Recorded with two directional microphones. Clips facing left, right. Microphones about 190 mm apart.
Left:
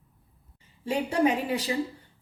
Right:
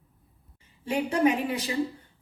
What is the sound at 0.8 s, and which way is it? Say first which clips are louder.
Speech: right 1 dB; 35° left (ahead or behind).